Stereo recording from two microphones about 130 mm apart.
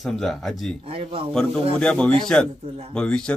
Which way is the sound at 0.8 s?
45° right (ahead or behind).